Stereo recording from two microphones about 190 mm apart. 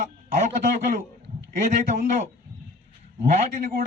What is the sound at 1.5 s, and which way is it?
Speech, 45° right (ahead or behind).